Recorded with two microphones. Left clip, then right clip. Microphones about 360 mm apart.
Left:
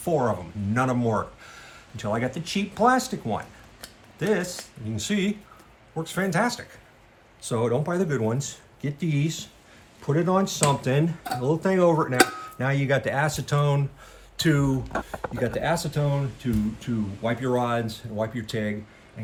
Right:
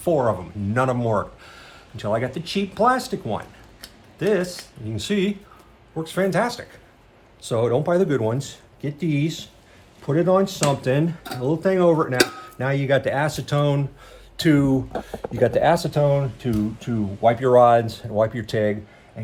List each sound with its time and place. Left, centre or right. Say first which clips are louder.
0.0 s speech: right 4 dB; centre
15.0 s speech: right 7 dB; right